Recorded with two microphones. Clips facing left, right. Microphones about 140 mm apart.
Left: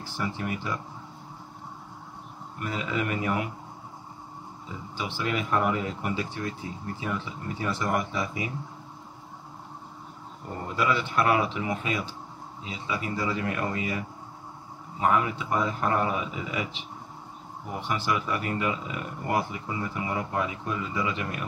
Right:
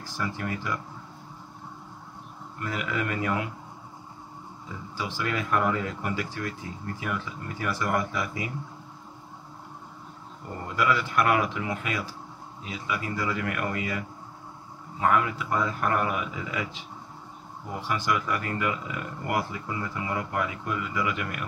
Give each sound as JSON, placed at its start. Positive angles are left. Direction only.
{"t": 0.2, "sound": "a man's voice", "side_deg": 20}
{"t": 2.6, "sound": "a man's voice", "side_deg": 20}
{"t": 4.6, "sound": "a man's voice", "side_deg": 20}
{"t": 10.5, "sound": "a man's voice", "side_deg": 20}